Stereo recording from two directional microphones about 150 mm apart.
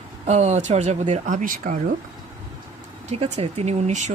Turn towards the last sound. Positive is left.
turn(degrees=-50)  # may be behind; listen again after turning